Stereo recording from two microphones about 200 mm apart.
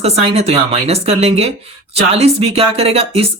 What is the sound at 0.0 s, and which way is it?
Speech, 30° right (ahead or behind).